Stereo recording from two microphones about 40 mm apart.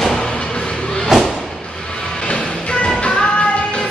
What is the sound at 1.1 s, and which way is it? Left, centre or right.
Music, centre.